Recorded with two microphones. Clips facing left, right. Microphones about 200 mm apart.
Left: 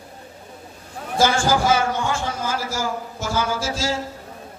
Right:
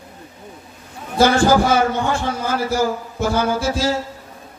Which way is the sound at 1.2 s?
60° right (ahead or behind).